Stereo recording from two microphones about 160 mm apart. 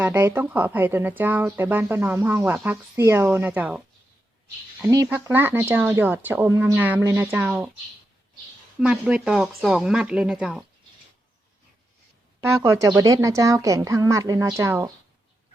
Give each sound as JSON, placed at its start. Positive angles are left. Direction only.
{"t": 0.0, "sound": "speech", "side_deg": -15}
{"t": 5.0, "sound": "speech", "side_deg": -10}
{"t": 8.8, "sound": "speech", "side_deg": -5}
{"t": 12.4, "sound": "a woman's voice", "side_deg": -15}